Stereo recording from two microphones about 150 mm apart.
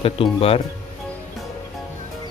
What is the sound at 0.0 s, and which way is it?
Speech, 40° left (ahead or behind).